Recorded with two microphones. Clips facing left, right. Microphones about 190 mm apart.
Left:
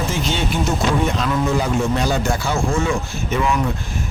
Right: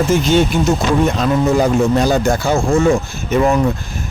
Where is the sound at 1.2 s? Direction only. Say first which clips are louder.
Right 6 dB; 40° right (ahead or behind).